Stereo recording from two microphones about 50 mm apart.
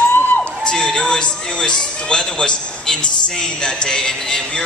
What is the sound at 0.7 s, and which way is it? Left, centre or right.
A man's voice, centre.